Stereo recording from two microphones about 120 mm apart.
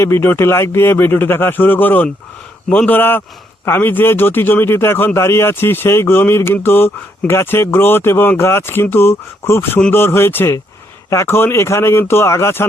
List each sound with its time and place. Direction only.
0.0 s a man's voice: 20° left (ahead or behind)